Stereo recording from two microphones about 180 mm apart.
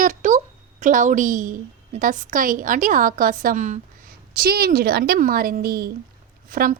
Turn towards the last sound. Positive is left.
turn(degrees=-50)  # may be behind; listen again after turning